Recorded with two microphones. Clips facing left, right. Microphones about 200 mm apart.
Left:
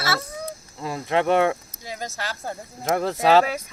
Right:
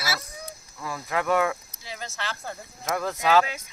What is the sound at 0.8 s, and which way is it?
Speech, 25° left (ahead or behind).